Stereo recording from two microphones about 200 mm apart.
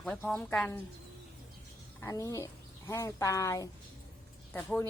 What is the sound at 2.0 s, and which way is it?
A woman's voice, 15° left (ahead or behind).